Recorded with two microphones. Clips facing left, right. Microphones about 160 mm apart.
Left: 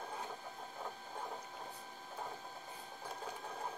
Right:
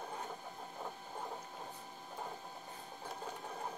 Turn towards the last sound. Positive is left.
turn(degrees=-10)  # may be behind; listen again after turning